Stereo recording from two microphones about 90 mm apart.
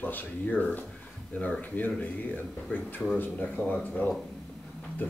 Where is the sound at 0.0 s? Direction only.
20° left (ahead or behind).